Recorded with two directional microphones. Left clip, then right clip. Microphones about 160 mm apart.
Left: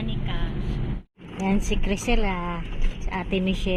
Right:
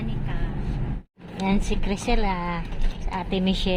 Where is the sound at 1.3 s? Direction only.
15° right (ahead or behind).